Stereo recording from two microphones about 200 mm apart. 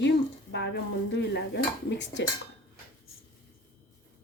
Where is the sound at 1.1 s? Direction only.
60° left (ahead or behind).